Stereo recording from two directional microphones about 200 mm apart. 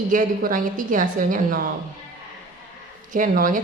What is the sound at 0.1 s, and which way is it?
A woman's voice, 40° right (ahead or behind).